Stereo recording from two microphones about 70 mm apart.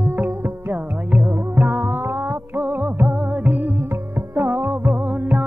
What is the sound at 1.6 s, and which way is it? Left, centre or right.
Music, right.